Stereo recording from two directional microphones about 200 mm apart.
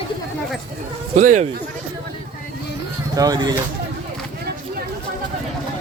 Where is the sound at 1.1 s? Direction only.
35° right (ahead or behind).